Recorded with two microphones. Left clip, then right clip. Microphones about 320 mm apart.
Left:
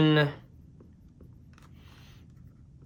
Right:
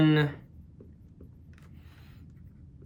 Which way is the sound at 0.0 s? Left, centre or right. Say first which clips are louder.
Left 1 dB; centre.